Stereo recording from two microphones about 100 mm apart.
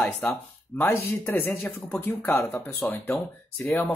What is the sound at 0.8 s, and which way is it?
Speech, 25° left (ahead or behind).